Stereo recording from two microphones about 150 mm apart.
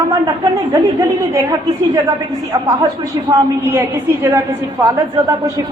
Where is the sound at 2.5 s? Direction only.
20° right (ahead or behind).